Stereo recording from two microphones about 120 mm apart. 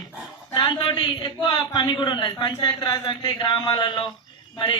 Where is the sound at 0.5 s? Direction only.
40° left (ahead or behind).